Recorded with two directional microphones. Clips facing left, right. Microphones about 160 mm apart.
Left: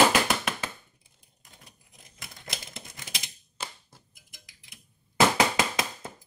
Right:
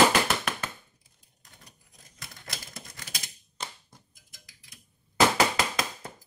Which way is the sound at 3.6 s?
5° left (ahead or behind).